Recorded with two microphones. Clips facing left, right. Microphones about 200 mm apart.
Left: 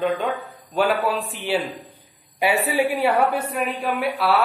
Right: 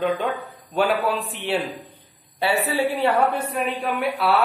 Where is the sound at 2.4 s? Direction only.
15° left (ahead or behind).